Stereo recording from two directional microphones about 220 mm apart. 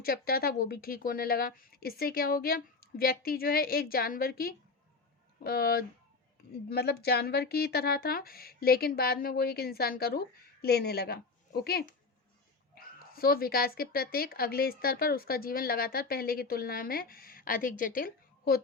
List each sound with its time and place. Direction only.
0.0 s speech: 45° left (ahead or behind)